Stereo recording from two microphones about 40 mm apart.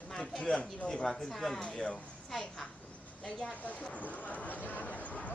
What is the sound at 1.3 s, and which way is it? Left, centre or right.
Speech, centre.